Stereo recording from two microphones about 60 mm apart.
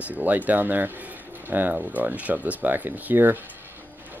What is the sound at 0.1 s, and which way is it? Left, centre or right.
Speech, right.